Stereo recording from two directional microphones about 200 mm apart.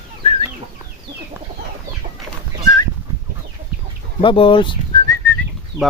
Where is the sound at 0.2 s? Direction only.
30° left (ahead or behind).